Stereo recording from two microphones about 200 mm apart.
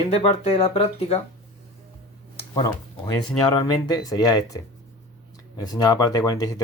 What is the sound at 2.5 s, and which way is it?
Speech, 20° left (ahead or behind).